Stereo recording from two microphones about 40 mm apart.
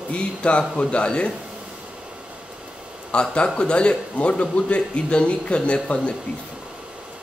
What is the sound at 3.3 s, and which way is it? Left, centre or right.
A man's voice, left.